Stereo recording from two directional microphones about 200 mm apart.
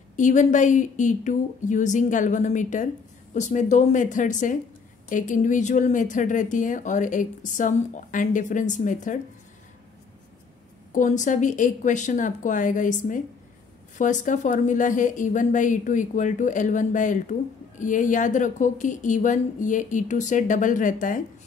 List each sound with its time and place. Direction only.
0.1 s a woman's voice: 40° left (ahead or behind)
10.9 s a woman's voice: 40° left (ahead or behind)